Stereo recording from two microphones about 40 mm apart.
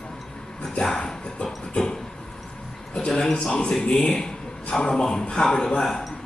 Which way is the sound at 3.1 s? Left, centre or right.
Centre.